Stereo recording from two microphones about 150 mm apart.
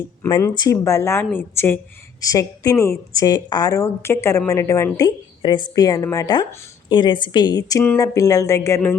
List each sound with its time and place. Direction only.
0.5 s a woman's voice: 25° left (ahead or behind)